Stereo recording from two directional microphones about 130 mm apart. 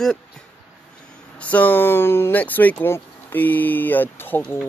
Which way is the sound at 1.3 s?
10° left (ahead or behind).